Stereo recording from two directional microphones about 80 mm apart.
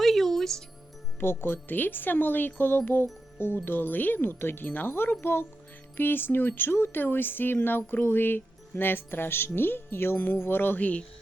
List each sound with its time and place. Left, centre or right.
0.0 s music: centre
1.2 s speech: left